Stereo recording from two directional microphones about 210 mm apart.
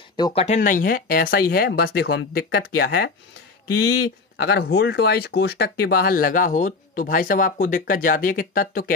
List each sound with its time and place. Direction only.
0.1 s speech: 25° left (ahead or behind)
0.6 s speech: 40° left (ahead or behind)